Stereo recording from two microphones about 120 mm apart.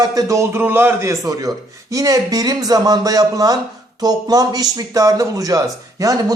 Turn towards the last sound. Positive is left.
turn(degrees=-30)  # may be behind; listen again after turning